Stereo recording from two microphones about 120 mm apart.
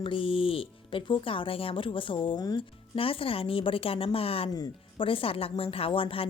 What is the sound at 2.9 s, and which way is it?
Speech, 50° left (ahead or behind).